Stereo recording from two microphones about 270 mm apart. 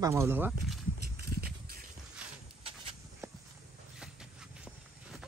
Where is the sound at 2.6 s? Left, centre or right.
Centre.